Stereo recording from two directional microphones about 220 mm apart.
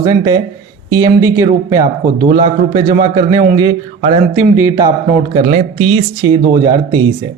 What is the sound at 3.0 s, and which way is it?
A man's voice, 20° right (ahead or behind).